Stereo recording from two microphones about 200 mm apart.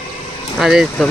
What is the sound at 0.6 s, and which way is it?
Speech, centre (ahead or behind).